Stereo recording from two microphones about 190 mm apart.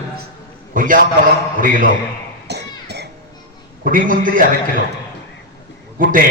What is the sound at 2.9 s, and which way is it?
Music, 60° right (ahead or behind).